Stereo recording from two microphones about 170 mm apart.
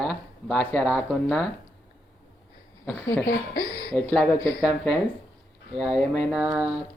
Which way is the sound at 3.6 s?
25° right (ahead or behind).